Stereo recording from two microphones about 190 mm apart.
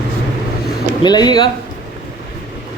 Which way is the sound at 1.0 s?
20° left (ahead or behind).